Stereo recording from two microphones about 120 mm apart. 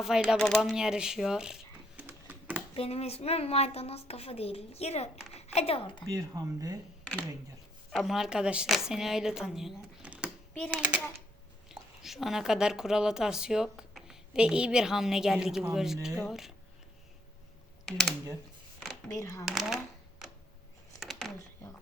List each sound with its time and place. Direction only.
0.3 s a woman's voice: 5° left (ahead or behind)
2.0 s typing: 15° right (ahead or behind)
2.7 s a woman's voice: 55° left (ahead or behind)
6.1 s speech: 30° right (ahead or behind)
7.0 s a sound: 10° left (ahead or behind)
7.9 s a woman's voice: 5° right (ahead or behind)
10.5 s a child's voice: 10° left (ahead or behind)
11.7 s a woman's voice: centre (ahead or behind)
17.8 s speech: centre (ahead or behind)
18.8 s a sound: centre (ahead or behind)
19.1 s speech: 25° left (ahead or behind)
19.5 s a woman's voice: centre (ahead or behind)
21.0 s a sound: centre (ahead or behind)